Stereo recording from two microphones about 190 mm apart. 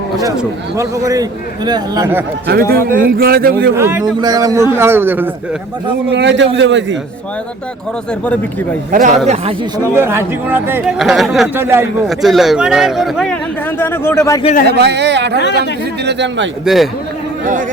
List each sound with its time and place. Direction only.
0.8 s a man's voice: 15° right (ahead or behind)
2.5 s a man's voice: 55° right (ahead or behind)
3.8 s speech: 15° right (ahead or behind)
6.1 s a man's voice: 65° right (ahead or behind)
8.2 s a man's voice: 10° left (ahead or behind)
9.2 s speech: 35° right (ahead or behind)
9.9 s speech: 15° right (ahead or behind)
11.6 s speech: 10° right (ahead or behind)
12.0 s a man's voice: centre (ahead or behind); by 14.4 s 15° left (ahead or behind)
14.7 s speech: 60° right (ahead or behind)
15.4 s speech: 65° left (ahead or behind)
16.0 s a man's voice: 70° right (ahead or behind)
16.6 s a man's voice: centre (ahead or behind)
17.4 s speech: 45° right (ahead or behind)